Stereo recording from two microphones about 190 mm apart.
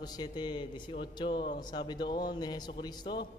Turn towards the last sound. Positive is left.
turn(degrees=20)  # may be behind; listen again after turning